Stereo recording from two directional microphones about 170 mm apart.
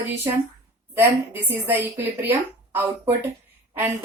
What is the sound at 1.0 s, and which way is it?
Speech, 10° right (ahead or behind).